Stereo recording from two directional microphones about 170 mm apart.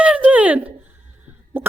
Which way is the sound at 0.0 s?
10° right (ahead or behind).